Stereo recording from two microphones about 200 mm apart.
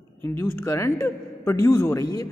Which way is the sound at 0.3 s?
10° left (ahead or behind).